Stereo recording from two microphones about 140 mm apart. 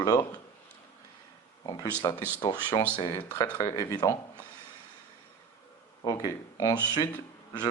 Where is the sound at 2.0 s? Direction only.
30° left (ahead or behind).